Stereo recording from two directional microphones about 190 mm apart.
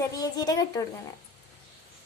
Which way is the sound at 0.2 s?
20° left (ahead or behind).